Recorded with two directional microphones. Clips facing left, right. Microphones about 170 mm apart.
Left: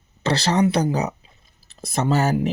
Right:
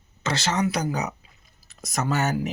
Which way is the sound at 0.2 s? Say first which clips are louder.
Left 5 dB; 35° left (ahead or behind).